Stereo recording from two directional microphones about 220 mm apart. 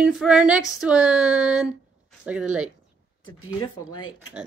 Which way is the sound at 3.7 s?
80° left.